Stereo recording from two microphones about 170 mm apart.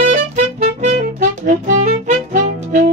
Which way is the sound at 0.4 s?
45° right (ahead or behind).